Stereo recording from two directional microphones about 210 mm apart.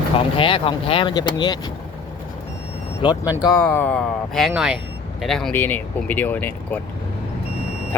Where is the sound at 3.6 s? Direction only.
5° left (ahead or behind).